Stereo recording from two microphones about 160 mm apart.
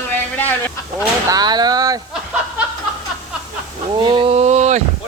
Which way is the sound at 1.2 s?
25° right (ahead or behind).